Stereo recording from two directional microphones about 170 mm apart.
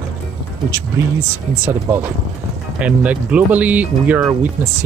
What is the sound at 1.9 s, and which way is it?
Speech, 10° right (ahead or behind).